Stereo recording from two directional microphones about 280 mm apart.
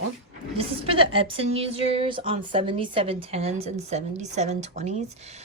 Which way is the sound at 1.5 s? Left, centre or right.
Centre.